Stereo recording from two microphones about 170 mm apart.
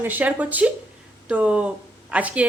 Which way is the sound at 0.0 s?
10° right (ahead or behind).